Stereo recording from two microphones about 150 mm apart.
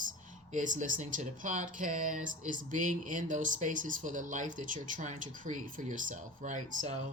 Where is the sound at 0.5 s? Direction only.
60° right (ahead or behind).